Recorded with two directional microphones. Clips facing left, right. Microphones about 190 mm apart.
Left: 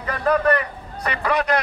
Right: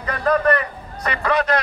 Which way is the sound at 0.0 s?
10° left (ahead or behind).